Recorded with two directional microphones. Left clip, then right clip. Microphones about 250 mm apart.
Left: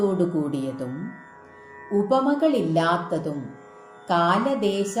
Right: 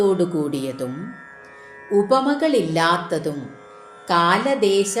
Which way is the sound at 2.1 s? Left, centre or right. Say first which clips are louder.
Right 1 dB; right.